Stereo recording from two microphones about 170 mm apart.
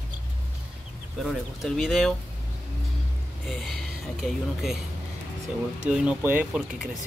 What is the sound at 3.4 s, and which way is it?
Speech, centre (ahead or behind).